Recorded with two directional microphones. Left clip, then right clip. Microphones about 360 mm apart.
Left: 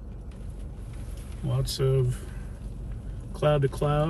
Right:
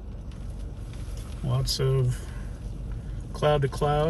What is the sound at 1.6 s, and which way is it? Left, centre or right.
Speech, centre.